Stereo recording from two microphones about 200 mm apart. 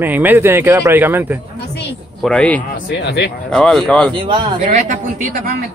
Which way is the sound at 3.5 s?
5° left (ahead or behind).